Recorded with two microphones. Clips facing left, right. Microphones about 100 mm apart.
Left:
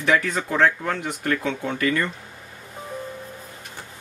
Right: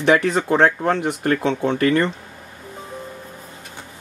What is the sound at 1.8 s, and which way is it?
Speech, 50° right (ahead or behind).